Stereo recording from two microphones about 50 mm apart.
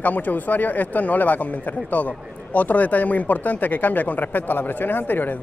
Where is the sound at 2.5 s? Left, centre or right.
Left.